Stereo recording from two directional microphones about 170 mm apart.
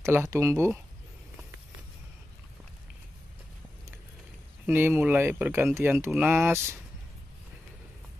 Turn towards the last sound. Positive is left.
turn(degrees=-15)  # may be behind; listen again after turning